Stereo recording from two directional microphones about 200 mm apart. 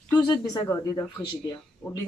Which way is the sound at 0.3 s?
15° left (ahead or behind).